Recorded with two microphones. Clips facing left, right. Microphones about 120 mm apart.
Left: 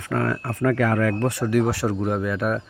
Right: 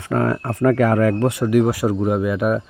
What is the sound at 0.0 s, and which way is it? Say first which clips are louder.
Speech: right 4 dB; 30° right (ahead or behind).